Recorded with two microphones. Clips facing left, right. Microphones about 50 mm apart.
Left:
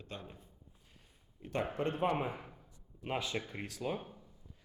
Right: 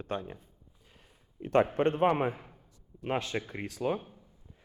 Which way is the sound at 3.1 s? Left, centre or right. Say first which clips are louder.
Right 5 dB; right.